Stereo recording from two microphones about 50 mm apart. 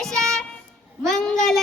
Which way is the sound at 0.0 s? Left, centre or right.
Centre.